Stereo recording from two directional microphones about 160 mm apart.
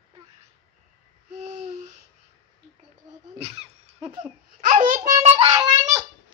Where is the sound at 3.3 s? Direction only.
40° right (ahead or behind).